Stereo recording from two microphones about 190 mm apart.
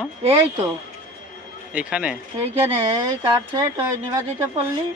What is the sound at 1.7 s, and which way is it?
Speech, 5° right (ahead or behind).